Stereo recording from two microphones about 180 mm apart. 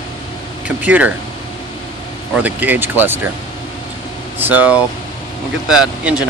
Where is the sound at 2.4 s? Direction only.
10° right (ahead or behind).